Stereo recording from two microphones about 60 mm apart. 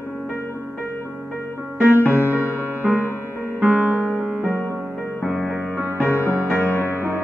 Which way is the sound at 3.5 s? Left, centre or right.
Right.